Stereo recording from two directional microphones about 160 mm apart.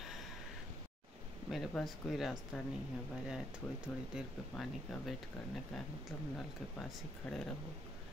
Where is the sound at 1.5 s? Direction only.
Centre (ahead or behind).